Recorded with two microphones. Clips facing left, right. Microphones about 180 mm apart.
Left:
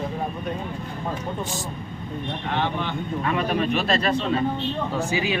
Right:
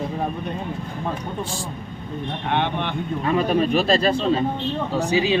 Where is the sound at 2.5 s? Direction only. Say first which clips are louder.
Right 3 dB; 60° right (ahead or behind).